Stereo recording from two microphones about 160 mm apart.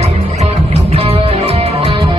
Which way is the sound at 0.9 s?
35° right (ahead or behind).